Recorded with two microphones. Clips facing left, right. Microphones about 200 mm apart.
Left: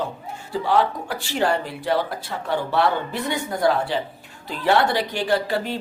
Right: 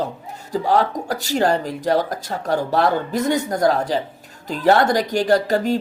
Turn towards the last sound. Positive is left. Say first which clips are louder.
# right 5 dB
turn(degrees=-45)  # may be behind; listen again after turning